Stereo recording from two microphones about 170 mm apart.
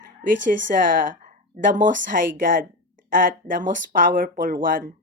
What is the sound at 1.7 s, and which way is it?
A woman's voice, 50° right (ahead or behind).